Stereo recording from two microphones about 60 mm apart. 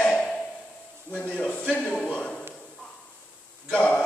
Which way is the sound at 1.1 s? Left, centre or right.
Left.